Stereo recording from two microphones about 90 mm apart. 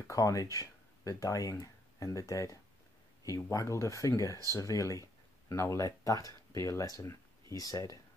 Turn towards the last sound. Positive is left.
turn(degrees=40)  # may be behind; listen again after turning